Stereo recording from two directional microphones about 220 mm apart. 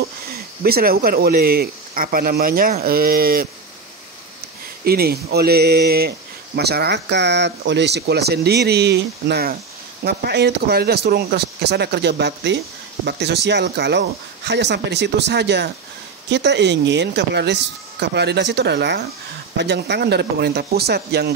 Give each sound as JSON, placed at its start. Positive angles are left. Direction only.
{"t": 0.7, "sound": "speech", "side_deg": -45}
{"t": 4.8, "sound": "speech", "side_deg": -45}